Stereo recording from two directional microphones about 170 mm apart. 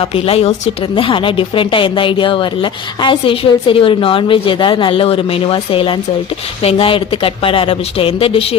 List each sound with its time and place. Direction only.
0.0 s a woman's voice: 35° left (ahead or behind)